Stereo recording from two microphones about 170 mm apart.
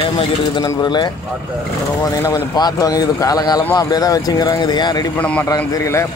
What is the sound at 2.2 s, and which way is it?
Speech, 20° left (ahead or behind).